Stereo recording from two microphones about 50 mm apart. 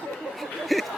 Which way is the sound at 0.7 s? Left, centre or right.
Centre.